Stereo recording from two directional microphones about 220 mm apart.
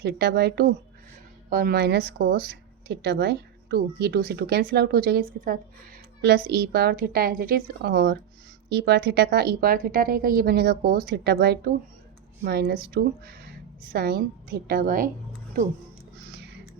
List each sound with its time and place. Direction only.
0.0 s speech: 45° right (ahead or behind)